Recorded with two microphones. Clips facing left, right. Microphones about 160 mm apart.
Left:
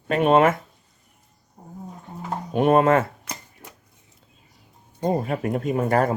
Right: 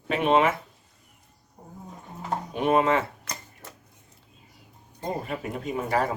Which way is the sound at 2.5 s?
50° left (ahead or behind).